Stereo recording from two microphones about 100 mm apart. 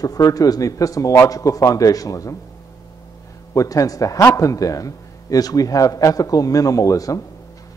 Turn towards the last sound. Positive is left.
turn(degrees=35)  # may be behind; listen again after turning